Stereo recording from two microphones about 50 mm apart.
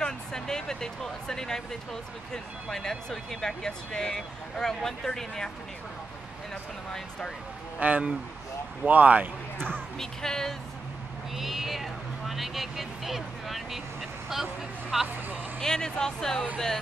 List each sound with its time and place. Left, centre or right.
0.0 s speech: centre
6.9 s speech: centre
7.8 s speech: right
9.6 s speech: centre
11.3 s speech: centre
15.6 s speech: centre